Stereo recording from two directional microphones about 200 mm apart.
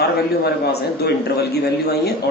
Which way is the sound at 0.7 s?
55° left (ahead or behind).